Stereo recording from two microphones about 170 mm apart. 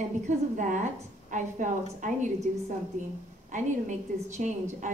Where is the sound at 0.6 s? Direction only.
50° right (ahead or behind).